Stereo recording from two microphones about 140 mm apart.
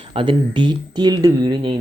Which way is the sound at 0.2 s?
35° right (ahead or behind).